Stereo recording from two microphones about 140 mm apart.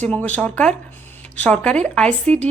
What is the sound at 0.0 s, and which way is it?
Speech, 10° left (ahead or behind).